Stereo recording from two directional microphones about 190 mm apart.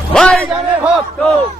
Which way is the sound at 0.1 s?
5° left (ahead or behind).